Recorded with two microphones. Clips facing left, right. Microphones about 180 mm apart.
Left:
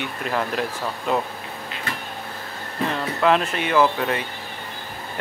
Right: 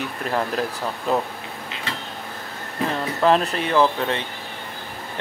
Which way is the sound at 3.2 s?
35° right (ahead or behind).